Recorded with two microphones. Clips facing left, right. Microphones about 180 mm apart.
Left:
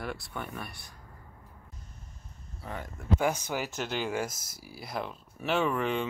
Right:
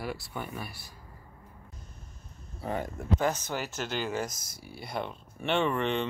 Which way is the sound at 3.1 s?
10° left (ahead or behind).